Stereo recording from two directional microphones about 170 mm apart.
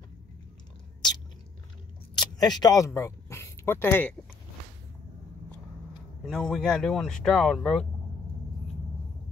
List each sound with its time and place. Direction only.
2.1 s speech: 25° left (ahead or behind)
6.4 s speech: 5° left (ahead or behind)